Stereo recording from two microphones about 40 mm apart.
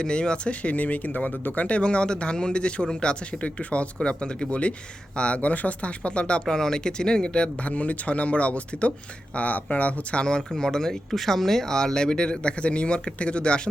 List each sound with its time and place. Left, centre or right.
0.0 s speech: left
6.4 s speech: centre